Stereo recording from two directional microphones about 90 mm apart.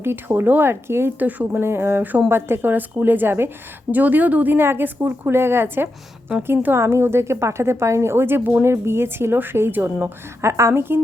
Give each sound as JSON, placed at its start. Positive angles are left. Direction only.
{"t": 0.0, "sound": "a woman's voice", "side_deg": -25}